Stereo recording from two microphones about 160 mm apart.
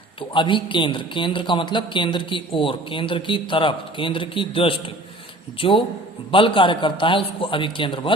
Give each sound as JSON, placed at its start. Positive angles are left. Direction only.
{"t": 0.2, "sound": "a man's voice", "side_deg": 30}